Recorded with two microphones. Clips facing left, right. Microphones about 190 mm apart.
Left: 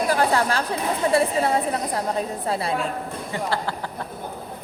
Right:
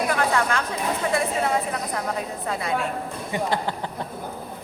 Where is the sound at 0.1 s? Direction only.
35° left (ahead or behind).